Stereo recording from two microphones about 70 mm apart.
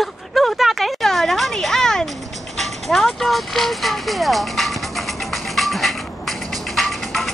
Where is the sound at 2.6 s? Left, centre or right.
Centre.